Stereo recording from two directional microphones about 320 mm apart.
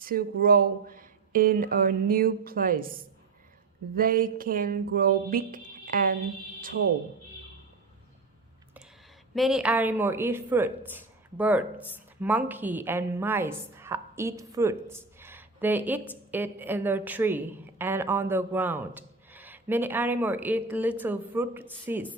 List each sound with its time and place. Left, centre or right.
0.0 s speech: right
9.3 s a woman's voice: centre